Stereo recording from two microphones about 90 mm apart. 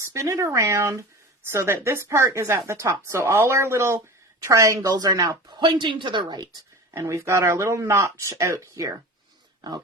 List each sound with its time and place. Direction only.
0.0 s a woman's voice: 35° right (ahead or behind)
5.5 s speech: 60° right (ahead or behind)
7.1 s a woman's voice: 35° right (ahead or behind)